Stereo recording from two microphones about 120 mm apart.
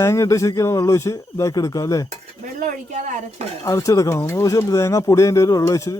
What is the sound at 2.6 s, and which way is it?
Speech, 90° right.